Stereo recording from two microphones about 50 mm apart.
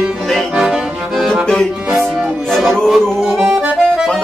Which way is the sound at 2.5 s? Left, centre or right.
Centre.